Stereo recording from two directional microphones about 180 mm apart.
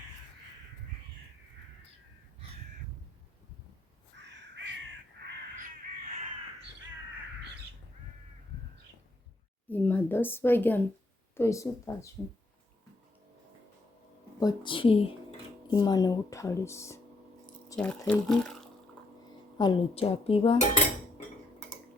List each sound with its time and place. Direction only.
4.4 s crow: 80° right
5.5 s crow: 45° right (ahead or behind)
9.6 s a woman's voice: 10° left (ahead or behind)
14.3 s a woman's voice: 25° left (ahead or behind); by 18.7 s 5° left (ahead or behind)
19.5 s dishes: 25° left (ahead or behind)